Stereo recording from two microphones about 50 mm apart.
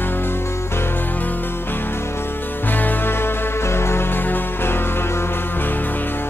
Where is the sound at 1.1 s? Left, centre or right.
Left.